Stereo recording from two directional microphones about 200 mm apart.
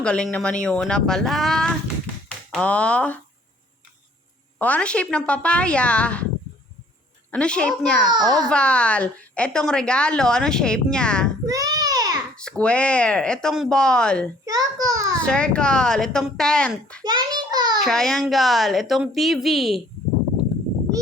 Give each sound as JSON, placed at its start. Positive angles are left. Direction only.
{"t": 0.0, "sound": "a woman's voice", "side_deg": 5}
{"t": 4.5, "sound": "a woman's voice", "side_deg": 5}
{"t": 7.3, "sound": "a woman's voice", "side_deg": 5}
{"t": 8.1, "sound": "a child's voice", "side_deg": -20}
{"t": 8.4, "sound": "a woman's voice", "side_deg": 5}
{"t": 11.4, "sound": "a sound", "side_deg": -20}
{"t": 12.4, "sound": "a woman's voice", "side_deg": 5}
{"t": 14.4, "sound": "a sound", "side_deg": -20}
{"t": 15.2, "sound": "a woman's voice", "side_deg": 5}
{"t": 17.0, "sound": "a child's voice", "side_deg": -20}
{"t": 17.7, "sound": "a woman's voice", "side_deg": 0}